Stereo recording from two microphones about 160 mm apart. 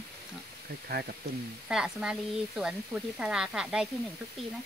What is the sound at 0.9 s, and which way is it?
Speech, 75° right (ahead or behind).